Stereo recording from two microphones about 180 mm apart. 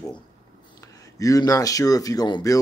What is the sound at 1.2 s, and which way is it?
Speech, 20° left (ahead or behind).